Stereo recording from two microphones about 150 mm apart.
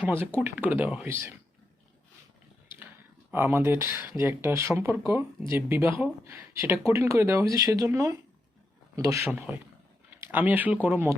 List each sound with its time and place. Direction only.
0.0 s speech: 15° right (ahead or behind)
2.6 s a sound: 10° right (ahead or behind)
3.3 s speech: 15° right (ahead or behind)